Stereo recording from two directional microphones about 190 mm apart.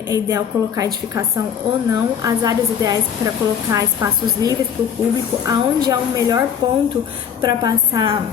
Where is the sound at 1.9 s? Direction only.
20° right (ahead or behind).